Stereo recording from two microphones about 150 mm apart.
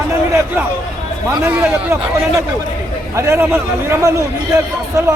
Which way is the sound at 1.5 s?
15° right (ahead or behind).